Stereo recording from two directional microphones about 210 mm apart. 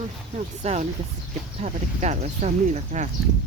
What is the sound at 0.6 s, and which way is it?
Speech, 35° right (ahead or behind).